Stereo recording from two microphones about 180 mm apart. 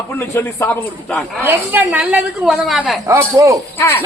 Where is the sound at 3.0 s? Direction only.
15° right (ahead or behind).